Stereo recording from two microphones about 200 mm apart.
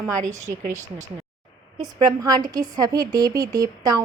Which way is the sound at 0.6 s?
35° right (ahead or behind).